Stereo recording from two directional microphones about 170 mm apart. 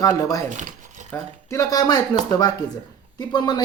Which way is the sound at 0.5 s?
45° right (ahead or behind).